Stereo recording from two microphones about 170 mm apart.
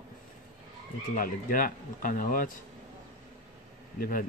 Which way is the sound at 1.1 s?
55° left (ahead or behind).